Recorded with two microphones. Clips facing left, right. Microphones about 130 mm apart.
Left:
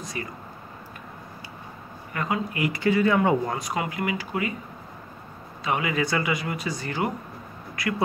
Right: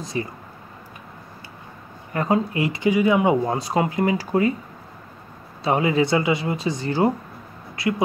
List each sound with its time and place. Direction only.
0.0 s speech: 25° right (ahead or behind)
2.1 s speech: 35° right (ahead or behind); by 3.5 s 15° right (ahead or behind)
3.5 s speech: 30° right (ahead or behind)
5.6 s speech: 30° right (ahead or behind)